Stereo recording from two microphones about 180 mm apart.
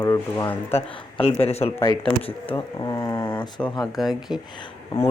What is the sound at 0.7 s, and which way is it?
Speech, 35° left (ahead or behind).